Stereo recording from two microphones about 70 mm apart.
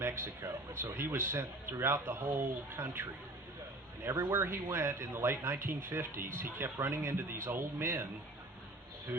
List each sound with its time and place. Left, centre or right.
0.0 s speech: right